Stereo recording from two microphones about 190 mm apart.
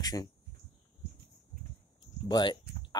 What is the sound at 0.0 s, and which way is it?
Speech, 20° left (ahead or behind).